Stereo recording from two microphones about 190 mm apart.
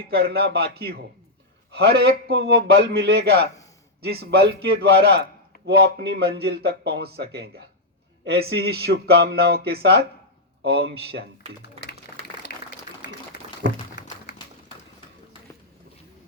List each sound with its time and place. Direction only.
0.0 s speech: 55° right (ahead or behind)